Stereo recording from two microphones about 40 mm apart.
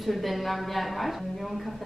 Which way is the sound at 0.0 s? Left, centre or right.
Centre.